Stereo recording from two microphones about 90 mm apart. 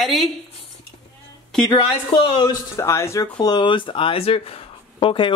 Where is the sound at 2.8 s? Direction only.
30° left (ahead or behind).